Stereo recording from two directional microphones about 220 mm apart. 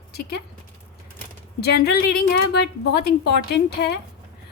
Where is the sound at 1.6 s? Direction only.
45° left (ahead or behind).